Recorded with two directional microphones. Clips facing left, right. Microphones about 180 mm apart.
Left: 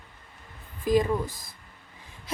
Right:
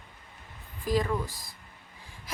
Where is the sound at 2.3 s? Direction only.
25° left (ahead or behind).